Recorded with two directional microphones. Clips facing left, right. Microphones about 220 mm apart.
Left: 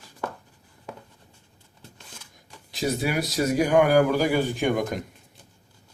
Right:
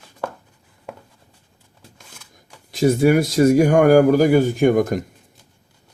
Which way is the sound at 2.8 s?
50° right (ahead or behind).